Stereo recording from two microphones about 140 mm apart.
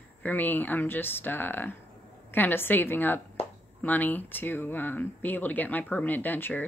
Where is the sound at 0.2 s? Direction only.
10° left (ahead or behind).